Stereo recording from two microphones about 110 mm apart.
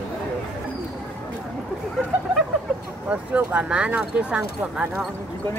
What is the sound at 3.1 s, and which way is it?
Speech, 15° right (ahead or behind).